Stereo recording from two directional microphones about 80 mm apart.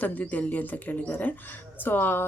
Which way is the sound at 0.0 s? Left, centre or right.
Centre.